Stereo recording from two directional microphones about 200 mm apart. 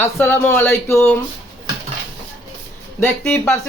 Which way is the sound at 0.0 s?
10° left (ahead or behind).